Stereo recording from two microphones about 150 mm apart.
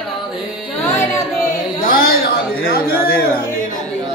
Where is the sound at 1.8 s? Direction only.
75° left (ahead or behind).